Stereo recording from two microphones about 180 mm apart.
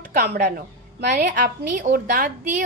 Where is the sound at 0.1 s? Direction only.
55° right (ahead or behind).